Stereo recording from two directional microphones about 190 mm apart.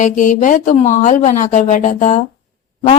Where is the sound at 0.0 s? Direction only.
40° left (ahead or behind).